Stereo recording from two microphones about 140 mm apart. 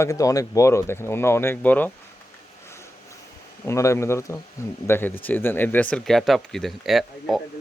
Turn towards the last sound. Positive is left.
turn(degrees=0)  # may be behind; listen again after turning